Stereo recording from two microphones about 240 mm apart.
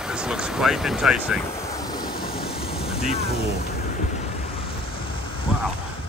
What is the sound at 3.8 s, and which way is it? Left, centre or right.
Vehicle, left.